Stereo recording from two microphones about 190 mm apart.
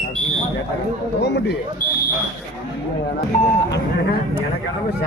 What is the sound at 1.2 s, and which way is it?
Speech, 65° left (ahead or behind).